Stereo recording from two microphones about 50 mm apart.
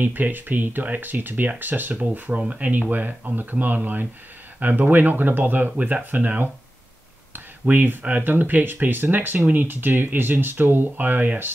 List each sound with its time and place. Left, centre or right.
0.0 s speech: right
7.6 s speech: right